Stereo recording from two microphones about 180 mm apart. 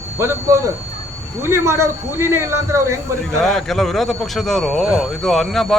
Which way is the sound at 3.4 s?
Centre (ahead or behind).